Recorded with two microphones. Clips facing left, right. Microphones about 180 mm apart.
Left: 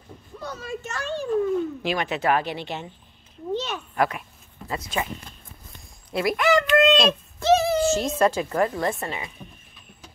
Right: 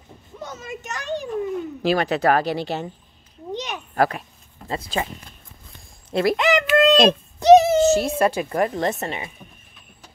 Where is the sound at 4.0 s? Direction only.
35° right (ahead or behind).